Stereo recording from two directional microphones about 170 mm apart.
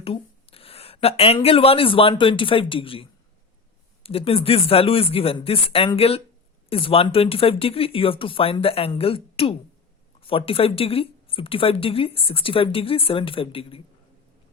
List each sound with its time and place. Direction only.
0.0 s speech: 35° left (ahead or behind)